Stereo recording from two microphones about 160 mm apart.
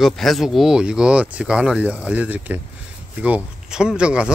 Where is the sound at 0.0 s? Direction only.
Centre (ahead or behind).